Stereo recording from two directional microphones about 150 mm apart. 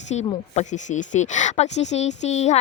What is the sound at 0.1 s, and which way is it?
Speech, 45° left (ahead or behind).